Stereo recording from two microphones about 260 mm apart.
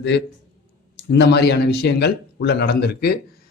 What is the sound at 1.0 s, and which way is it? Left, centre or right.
Speech, left.